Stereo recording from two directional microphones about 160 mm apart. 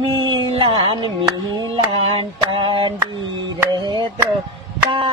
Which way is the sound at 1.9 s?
35° right (ahead or behind).